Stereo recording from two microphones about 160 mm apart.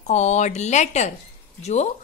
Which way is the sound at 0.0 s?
45° left (ahead or behind).